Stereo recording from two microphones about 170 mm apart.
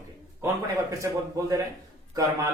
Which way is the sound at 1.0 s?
20° right (ahead or behind).